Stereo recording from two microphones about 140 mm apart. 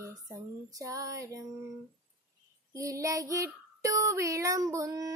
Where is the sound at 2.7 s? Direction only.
25° right (ahead or behind).